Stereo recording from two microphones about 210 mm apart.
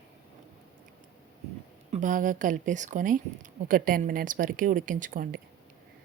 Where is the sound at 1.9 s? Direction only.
35° right (ahead or behind).